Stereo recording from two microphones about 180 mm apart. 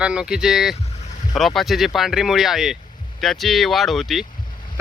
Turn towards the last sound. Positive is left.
turn(degrees=0)  # may be behind; listen again after turning